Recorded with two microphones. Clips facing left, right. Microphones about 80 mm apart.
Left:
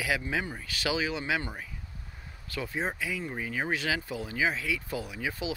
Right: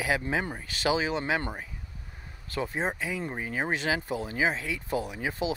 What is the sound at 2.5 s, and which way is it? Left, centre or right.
Speech, right.